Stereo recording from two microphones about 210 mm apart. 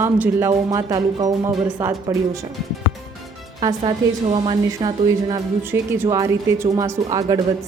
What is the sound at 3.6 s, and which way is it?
A woman's voice, 15° right (ahead or behind).